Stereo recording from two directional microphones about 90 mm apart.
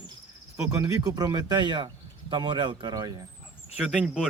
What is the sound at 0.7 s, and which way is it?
Speech, 40° right (ahead or behind).